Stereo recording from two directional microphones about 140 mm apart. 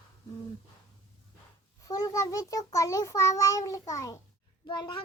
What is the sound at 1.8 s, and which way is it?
A child's voice, 25° left (ahead or behind).